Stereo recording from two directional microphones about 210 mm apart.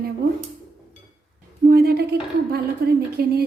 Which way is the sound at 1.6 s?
45° right (ahead or behind).